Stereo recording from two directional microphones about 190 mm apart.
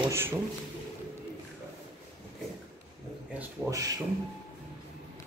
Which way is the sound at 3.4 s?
15° right (ahead or behind).